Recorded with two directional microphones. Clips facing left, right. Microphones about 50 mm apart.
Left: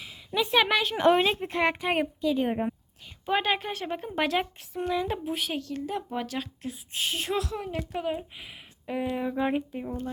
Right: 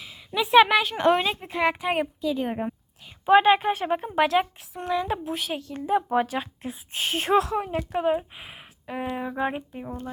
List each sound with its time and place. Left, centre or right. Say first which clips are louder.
0.0 s a woman's voice: right 1 dB; centre
3.2 s speech: right 9 dB; centre
4.1 s speech: right 4 dB; centre
5.7 s a woman's voice: right 8 dB; right
6.0 s speech: right 9 dB; right
6.2 s a woman's voice: right 3 dB; right
9.5 s speech: left 3 dB; centre